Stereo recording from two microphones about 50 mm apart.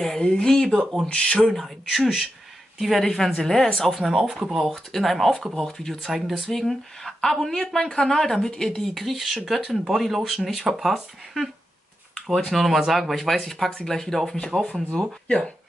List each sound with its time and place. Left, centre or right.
0.0 s speech: centre
1.0 s speech: left
1.5 s speech: centre
4.2 s speech: centre
8.9 s speech: centre; by 15.5 s left